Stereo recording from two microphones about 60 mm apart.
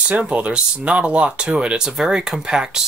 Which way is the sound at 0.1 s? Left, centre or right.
Right.